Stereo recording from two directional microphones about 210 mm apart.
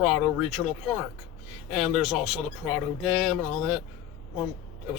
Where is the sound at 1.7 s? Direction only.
Centre (ahead or behind).